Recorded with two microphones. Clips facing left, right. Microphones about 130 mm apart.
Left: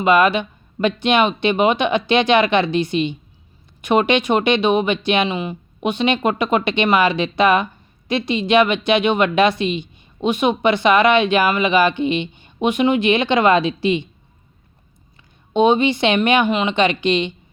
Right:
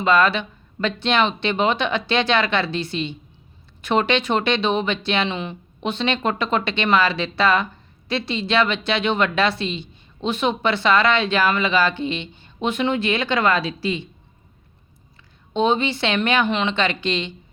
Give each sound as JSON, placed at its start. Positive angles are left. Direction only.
{"t": 0.0, "sound": "speech", "side_deg": 15}
{"t": 15.5, "sound": "speech", "side_deg": 15}